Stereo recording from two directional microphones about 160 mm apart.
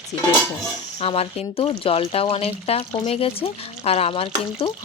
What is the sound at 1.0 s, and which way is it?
Speech, 40° left (ahead or behind).